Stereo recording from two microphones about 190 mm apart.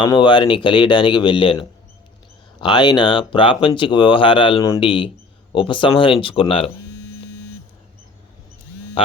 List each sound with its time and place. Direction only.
0.0 s speech: 25° left (ahead or behind)